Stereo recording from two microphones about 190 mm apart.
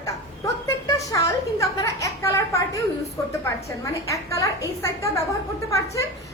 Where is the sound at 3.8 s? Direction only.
15° left (ahead or behind).